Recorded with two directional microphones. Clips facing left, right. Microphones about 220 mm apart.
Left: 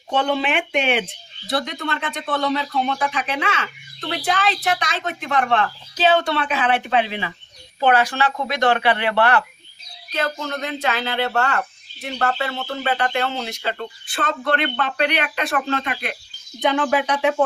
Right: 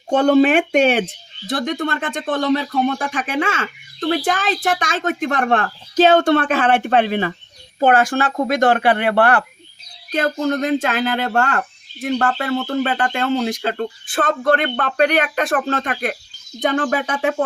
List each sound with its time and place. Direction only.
0.1 s speech: 45° right (ahead or behind)